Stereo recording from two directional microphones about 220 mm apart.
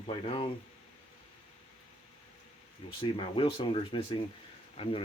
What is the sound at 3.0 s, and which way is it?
Speech, 25° left (ahead or behind).